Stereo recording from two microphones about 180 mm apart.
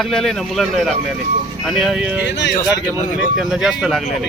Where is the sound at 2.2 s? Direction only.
70° left (ahead or behind).